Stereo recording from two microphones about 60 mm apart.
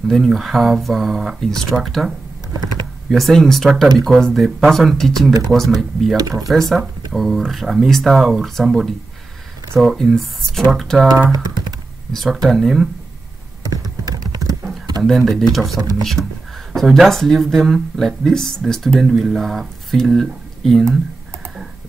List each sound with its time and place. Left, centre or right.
0.1 s speech: centre
3.1 s speech: centre
12.1 s speech: centre
13.7 s typing: right
15.0 s speech: centre